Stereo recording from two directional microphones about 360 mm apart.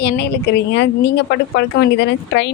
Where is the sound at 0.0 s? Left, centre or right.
Left.